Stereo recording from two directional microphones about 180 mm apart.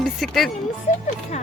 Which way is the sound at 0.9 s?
40° left (ahead or behind).